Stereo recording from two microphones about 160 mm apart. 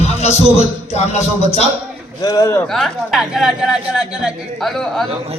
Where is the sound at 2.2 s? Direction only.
25° left (ahead or behind).